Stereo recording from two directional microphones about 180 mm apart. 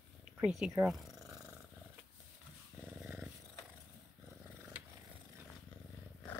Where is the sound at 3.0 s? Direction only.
5° right (ahead or behind).